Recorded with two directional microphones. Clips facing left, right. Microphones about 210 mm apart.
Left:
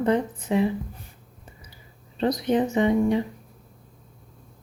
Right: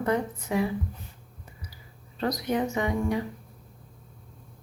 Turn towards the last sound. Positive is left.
turn(degrees=25)  # may be behind; listen again after turning